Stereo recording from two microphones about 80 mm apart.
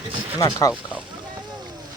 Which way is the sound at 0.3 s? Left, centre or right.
Left.